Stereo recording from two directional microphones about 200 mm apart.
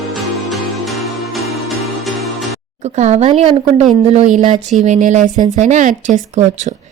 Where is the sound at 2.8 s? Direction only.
35° right (ahead or behind).